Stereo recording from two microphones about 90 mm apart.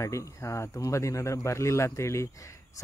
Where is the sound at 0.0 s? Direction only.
35° left (ahead or behind).